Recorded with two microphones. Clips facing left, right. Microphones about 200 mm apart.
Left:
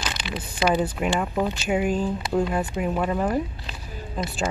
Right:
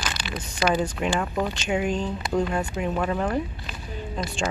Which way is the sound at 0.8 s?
5° left (ahead or behind).